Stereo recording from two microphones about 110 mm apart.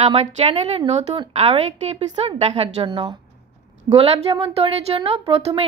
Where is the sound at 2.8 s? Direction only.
60° right (ahead or behind).